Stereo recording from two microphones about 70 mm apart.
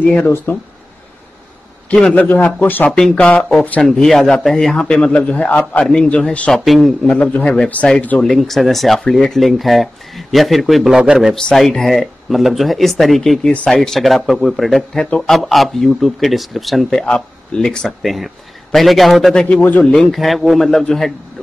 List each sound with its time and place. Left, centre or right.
0.2 s a man's voice: left
2.1 s a man's voice: left
3.8 s a man's voice: centre; by 5.9 s left
6.5 s speech: centre
7.1 s a man's voice: centre
8.2 s speech: centre
16.9 s speech: centre
19.4 s a man's voice: left
19.8 s speech: centre